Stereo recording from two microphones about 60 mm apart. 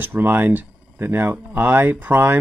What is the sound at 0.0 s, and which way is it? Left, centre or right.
Speech, right.